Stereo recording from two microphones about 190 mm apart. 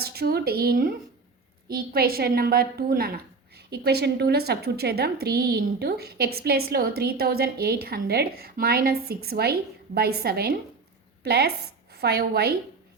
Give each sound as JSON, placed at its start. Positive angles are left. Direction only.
{"t": 0.0, "sound": "a woman's voice", "side_deg": -55}